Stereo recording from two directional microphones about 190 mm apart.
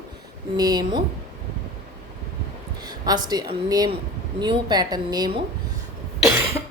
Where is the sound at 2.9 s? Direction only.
20° right (ahead or behind).